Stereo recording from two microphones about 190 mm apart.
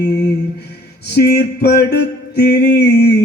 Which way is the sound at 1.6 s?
60° left (ahead or behind).